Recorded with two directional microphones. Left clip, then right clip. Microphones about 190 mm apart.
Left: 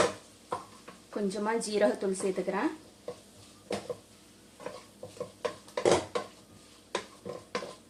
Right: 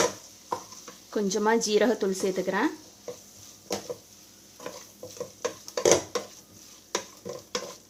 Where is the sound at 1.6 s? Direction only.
45° right (ahead or behind).